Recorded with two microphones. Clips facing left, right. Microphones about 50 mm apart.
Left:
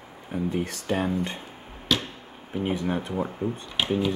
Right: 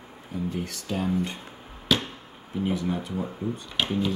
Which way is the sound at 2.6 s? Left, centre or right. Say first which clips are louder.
Left 1 dB; left.